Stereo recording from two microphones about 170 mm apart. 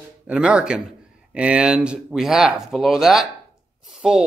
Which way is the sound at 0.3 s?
5° right (ahead or behind).